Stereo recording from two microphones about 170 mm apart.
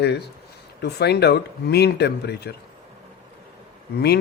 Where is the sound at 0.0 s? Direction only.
75° left (ahead or behind).